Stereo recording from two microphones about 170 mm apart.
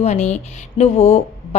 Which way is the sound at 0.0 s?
40° left (ahead or behind).